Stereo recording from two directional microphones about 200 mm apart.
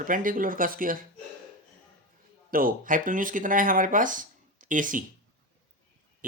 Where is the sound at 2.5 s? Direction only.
45° right (ahead or behind).